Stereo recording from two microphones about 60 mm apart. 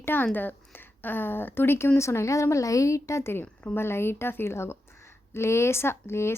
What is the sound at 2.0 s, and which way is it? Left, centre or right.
A woman's voice, left.